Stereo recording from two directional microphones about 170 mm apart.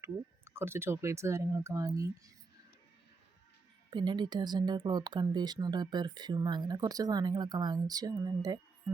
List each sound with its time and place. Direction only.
0.0 s speech: 15° right (ahead or behind)
3.8 s speech: 25° right (ahead or behind)